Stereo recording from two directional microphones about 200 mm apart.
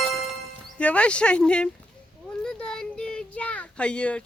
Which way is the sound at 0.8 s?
5° left (ahead or behind).